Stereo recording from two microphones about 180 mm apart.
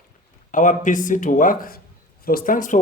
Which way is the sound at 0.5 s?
45° left (ahead or behind).